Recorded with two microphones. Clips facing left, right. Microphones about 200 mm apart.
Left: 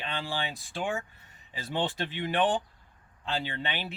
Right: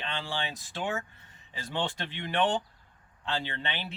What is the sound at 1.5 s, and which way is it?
Speech, 15° left (ahead or behind).